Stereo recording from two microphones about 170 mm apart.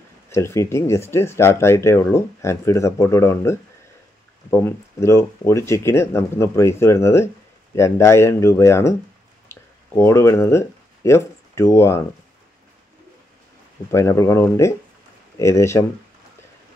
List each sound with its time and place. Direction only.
0.3 s speech: 15° left (ahead or behind)
13.9 s speech: 20° left (ahead or behind)